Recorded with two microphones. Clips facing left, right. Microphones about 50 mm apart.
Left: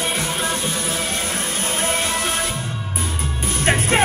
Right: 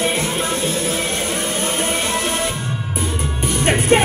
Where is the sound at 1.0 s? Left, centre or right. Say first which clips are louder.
Right 3 dB; right.